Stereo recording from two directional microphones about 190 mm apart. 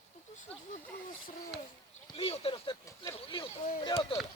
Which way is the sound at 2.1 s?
30° left (ahead or behind).